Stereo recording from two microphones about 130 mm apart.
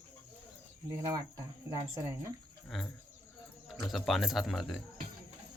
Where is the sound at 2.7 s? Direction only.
Centre (ahead or behind).